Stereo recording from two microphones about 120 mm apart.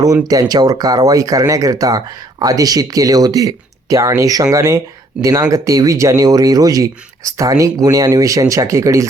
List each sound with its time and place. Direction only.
0.0 s speech: 30° right (ahead or behind)